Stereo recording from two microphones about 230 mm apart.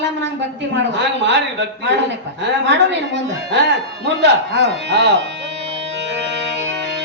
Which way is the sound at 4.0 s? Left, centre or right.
Right.